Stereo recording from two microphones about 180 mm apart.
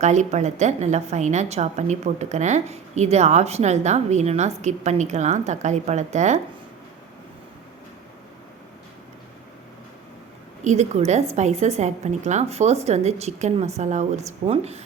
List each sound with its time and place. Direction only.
0.0 s a woman's voice: 40° right (ahead or behind)
10.6 s a woman's voice: 40° right (ahead or behind)